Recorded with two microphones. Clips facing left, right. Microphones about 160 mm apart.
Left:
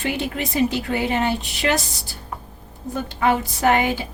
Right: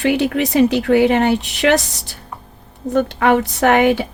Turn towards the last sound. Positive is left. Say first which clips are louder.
# right 6 dB
turn(degrees=-75)  # may be behind; listen again after turning